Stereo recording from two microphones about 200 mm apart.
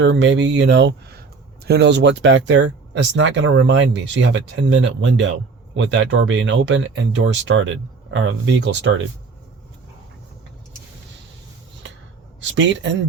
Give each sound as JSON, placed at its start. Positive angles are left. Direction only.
{"t": 0.0, "sound": "speech", "side_deg": -65}
{"t": 12.4, "sound": "speech", "side_deg": -70}